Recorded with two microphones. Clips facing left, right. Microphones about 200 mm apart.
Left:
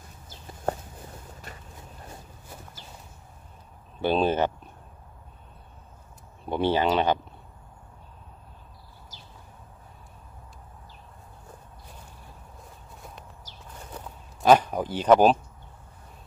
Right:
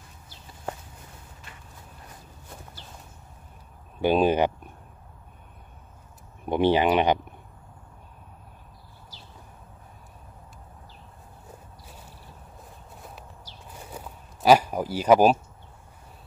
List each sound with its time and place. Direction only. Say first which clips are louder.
4.0 s speech: right 3 dB; 10° right (ahead or behind)
6.4 s speech: right 3 dB; 15° right (ahead or behind)
13.8 s a sound: even; 10° right (ahead or behind)